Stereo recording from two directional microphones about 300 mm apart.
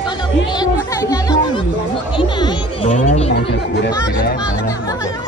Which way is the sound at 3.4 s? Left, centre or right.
Left.